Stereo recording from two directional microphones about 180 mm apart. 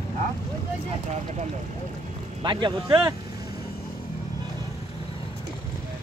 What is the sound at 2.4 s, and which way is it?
Speech, 25° right (ahead or behind).